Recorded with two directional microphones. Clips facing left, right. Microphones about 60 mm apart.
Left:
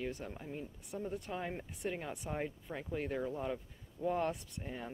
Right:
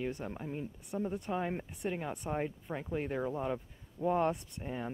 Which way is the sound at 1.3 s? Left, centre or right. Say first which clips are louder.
Right 7 dB; centre.